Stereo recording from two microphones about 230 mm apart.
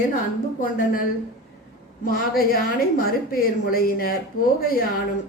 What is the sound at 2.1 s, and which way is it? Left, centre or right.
A woman's voice, left.